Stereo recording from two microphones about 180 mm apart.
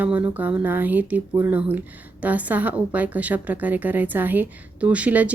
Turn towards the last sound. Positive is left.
turn(degrees=-10)  # may be behind; listen again after turning